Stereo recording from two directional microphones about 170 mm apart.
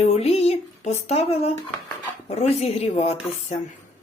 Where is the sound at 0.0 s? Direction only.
35° left (ahead or behind).